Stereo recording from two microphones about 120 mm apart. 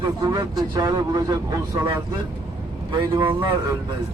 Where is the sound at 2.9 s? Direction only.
45° right (ahead or behind).